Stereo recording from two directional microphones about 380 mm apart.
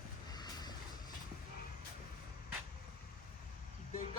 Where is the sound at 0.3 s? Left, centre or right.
Centre.